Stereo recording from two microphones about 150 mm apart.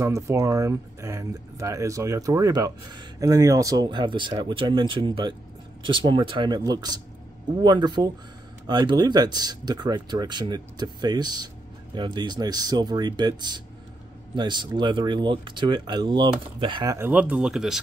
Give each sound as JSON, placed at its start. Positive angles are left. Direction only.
{"t": 0.0, "sound": "speech", "side_deg": -20}
{"t": 17.0, "sound": "speech", "side_deg": -10}